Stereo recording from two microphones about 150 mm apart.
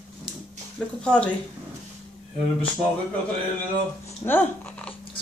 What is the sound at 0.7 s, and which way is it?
Speech, 5° left (ahead or behind).